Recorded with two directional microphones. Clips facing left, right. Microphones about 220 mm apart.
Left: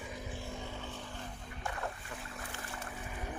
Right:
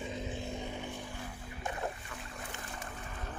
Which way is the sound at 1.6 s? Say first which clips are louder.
Right 2 dB; 20° right (ahead or behind).